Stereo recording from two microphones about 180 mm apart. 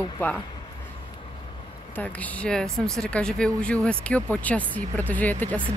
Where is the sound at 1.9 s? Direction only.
10° left (ahead or behind).